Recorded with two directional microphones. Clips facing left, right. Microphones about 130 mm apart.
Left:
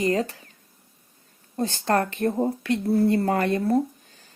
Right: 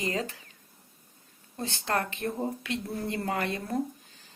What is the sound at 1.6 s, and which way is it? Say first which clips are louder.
Speech: left 7 dB; 40° left (ahead or behind).